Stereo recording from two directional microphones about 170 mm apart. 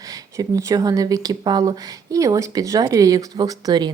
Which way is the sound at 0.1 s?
20° right (ahead or behind).